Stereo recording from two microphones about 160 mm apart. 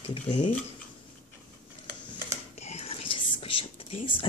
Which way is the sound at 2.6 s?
40° left (ahead or behind).